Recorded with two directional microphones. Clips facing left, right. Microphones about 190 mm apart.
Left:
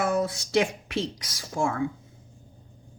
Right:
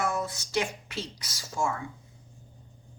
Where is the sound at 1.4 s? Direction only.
55° left (ahead or behind).